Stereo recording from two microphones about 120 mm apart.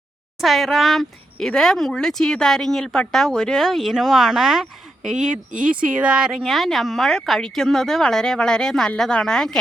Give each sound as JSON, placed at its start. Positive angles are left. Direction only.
{"t": 0.4, "sound": "speech", "side_deg": 0}